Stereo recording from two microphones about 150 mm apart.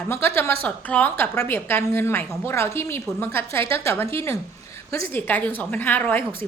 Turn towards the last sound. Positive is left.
turn(degrees=10)  # may be behind; listen again after turning